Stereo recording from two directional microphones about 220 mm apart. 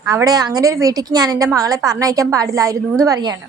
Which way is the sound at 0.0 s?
15° right (ahead or behind).